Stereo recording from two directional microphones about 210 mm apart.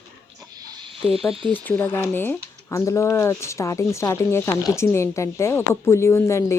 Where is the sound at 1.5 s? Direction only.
10° left (ahead or behind).